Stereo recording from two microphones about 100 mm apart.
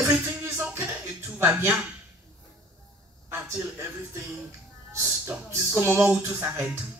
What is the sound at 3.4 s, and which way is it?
Speech, 25° right (ahead or behind).